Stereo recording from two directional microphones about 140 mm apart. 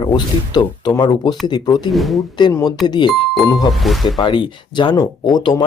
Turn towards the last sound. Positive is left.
turn(degrees=30)  # may be behind; listen again after turning